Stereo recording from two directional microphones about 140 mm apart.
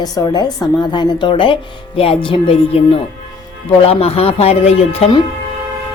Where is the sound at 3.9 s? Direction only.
45° left (ahead or behind).